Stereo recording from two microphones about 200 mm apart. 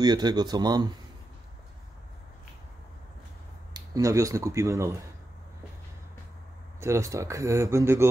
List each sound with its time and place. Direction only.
0.0 s speech: 20° right (ahead or behind)
3.7 s speech: 15° right (ahead or behind)
6.8 s speech: 15° right (ahead or behind)